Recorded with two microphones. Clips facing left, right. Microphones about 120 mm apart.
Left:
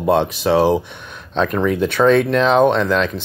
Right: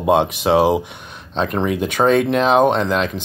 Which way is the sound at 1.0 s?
35° right (ahead or behind).